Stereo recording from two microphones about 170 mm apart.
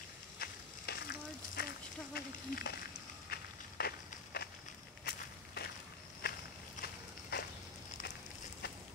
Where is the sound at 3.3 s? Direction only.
65° left (ahead or behind).